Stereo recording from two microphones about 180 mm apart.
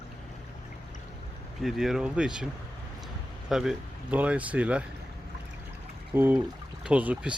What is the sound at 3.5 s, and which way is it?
Speech, 5° right (ahead or behind).